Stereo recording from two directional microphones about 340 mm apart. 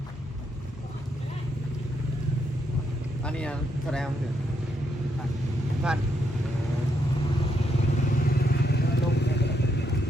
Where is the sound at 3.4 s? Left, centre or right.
Centre.